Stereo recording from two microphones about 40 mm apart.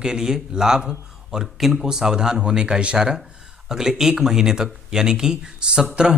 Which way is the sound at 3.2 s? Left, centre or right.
Centre.